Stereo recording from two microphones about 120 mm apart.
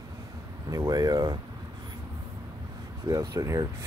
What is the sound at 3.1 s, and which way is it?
Speech, 30° right (ahead or behind).